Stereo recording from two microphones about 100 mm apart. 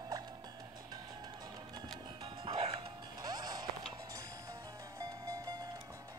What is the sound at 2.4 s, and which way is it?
Music, 70° right (ahead or behind).